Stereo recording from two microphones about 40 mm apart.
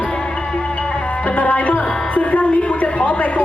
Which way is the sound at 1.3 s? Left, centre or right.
Left.